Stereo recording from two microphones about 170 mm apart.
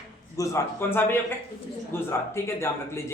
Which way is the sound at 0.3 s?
15° left (ahead or behind).